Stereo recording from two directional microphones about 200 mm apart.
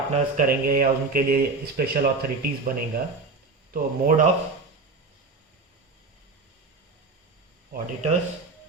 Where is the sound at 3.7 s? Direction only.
40° right (ahead or behind).